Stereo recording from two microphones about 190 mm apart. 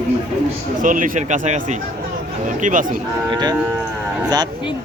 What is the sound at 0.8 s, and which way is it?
Speech, 45° right (ahead or behind).